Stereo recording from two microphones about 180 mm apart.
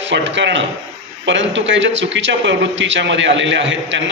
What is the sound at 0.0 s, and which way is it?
A man's voice, 90° right.